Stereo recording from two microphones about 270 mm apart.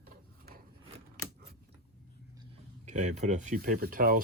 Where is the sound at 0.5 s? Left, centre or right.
Right.